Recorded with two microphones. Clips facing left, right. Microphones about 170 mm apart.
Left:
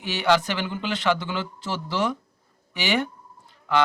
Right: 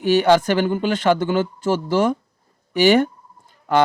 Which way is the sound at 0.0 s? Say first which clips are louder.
Right 7 dB; 45° right (ahead or behind).